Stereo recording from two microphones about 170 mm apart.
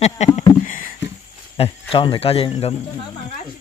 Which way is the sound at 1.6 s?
30° left (ahead or behind).